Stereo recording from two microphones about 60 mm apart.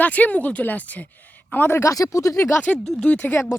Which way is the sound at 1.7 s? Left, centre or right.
Left.